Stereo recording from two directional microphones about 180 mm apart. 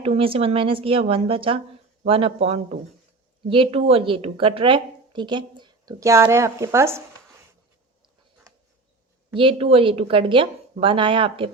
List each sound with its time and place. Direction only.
0.0 s a woman's voice: 30° right (ahead or behind); by 7.0 s 15° right (ahead or behind)
9.3 s speech: 30° right (ahead or behind)